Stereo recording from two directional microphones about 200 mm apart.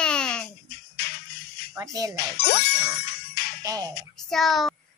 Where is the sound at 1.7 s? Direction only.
15° right (ahead or behind).